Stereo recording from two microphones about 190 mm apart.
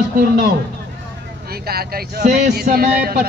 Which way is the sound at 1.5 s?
55° right (ahead or behind).